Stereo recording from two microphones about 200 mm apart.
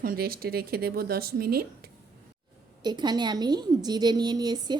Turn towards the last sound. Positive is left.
turn(degrees=-20)  # may be behind; listen again after turning